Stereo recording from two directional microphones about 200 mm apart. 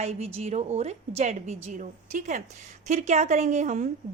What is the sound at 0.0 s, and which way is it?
A woman's voice, 35° right (ahead or behind).